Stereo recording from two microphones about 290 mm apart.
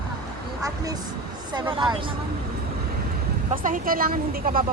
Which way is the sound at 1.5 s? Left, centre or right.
Centre.